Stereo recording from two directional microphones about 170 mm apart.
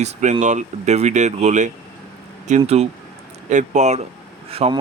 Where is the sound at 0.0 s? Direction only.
40° right (ahead or behind).